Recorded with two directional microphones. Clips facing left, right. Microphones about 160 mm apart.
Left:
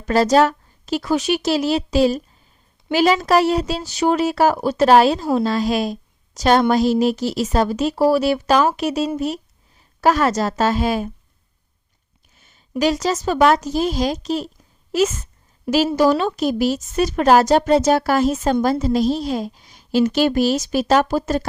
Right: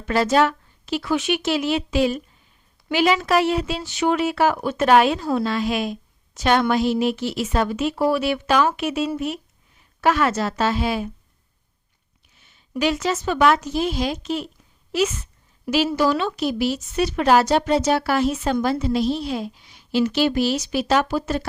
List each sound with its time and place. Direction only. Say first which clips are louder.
0.0 s a woman's voice: left 4 dB; 40° left (ahead or behind)
12.8 s a woman's voice: left 3 dB; 40° left (ahead or behind)